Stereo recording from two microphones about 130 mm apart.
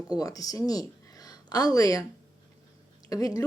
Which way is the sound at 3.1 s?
30° left (ahead or behind).